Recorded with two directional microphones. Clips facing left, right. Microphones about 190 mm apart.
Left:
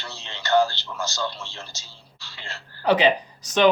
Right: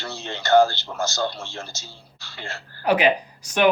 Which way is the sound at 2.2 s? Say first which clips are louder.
Right 4 dB; 50° right (ahead or behind).